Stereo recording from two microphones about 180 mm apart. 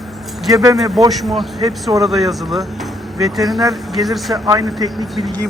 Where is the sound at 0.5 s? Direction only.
20° right (ahead or behind).